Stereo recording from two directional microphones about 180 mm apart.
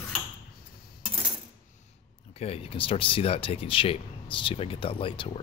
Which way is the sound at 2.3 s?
35° left (ahead or behind).